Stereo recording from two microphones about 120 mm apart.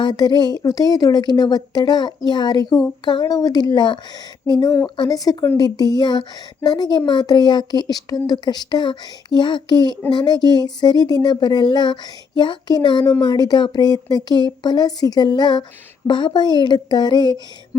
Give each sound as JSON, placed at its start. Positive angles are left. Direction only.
{"t": 0.0, "sound": "speech", "side_deg": 35}
{"t": 4.6, "sound": "a woman's voice", "side_deg": 25}